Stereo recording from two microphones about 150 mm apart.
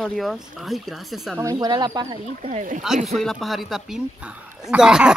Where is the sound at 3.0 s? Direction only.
Centre (ahead or behind).